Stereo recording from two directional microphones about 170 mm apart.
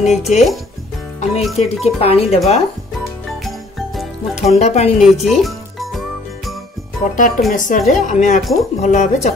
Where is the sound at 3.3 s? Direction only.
Centre (ahead or behind).